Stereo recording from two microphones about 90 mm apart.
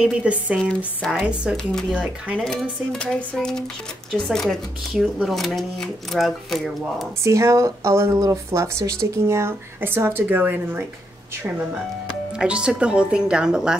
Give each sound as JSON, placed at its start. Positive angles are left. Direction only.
{"t": 0.0, "sound": "a woman's voice", "side_deg": -10}
{"t": 0.6, "sound": "speech", "side_deg": 5}
{"t": 1.2, "sound": "a woman's voice", "side_deg": -10}
{"t": 1.6, "sound": "speech", "side_deg": 5}
{"t": 7.2, "sound": "speech", "side_deg": -35}
{"t": 12.4, "sound": "a woman's voice", "side_deg": -10}